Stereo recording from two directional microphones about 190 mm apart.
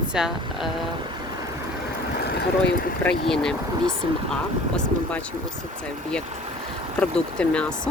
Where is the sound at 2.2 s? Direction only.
60° left (ahead or behind).